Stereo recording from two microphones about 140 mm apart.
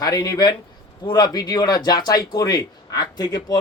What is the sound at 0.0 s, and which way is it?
Speech, 25° left (ahead or behind).